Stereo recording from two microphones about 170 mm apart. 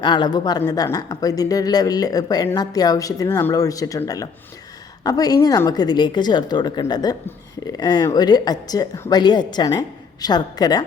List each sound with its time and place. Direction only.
0.0 s speech: 25° left (ahead or behind)